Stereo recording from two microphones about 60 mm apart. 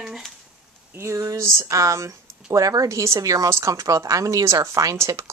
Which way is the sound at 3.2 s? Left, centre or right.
Right.